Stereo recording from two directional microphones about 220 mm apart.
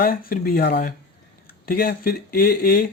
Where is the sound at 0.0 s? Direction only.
40° left (ahead or behind).